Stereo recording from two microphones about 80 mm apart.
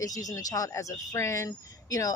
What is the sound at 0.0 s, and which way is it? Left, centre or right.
Speech, left.